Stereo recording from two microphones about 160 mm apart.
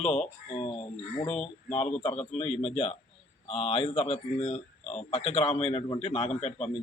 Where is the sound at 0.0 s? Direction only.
40° left (ahead or behind).